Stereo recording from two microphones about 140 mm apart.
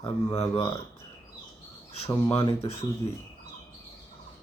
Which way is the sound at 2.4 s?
45° left (ahead or behind).